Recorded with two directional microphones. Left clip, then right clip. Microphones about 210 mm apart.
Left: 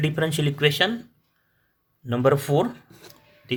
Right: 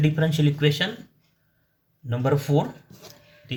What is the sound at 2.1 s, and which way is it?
Speech, 45° left (ahead or behind).